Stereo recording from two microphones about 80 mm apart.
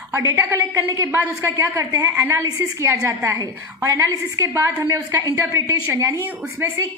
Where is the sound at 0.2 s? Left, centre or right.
Right.